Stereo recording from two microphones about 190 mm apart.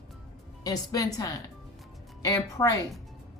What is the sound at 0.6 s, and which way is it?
A woman's voice, 20° left (ahead or behind).